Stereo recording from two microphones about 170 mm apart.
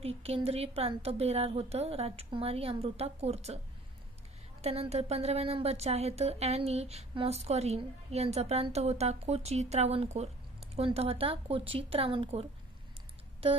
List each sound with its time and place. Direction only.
0.0 s speech: 35° right (ahead or behind)
4.6 s speech: 40° right (ahead or behind)